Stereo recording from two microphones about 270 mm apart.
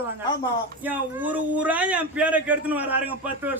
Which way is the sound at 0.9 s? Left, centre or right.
Centre.